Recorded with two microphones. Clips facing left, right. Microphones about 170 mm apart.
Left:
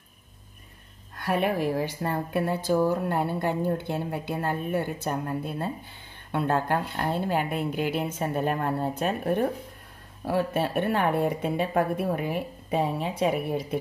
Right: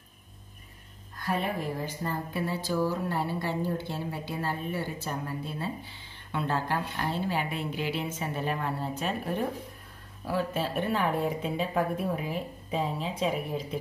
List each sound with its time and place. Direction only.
1.1 s a woman's voice: 65° left (ahead or behind)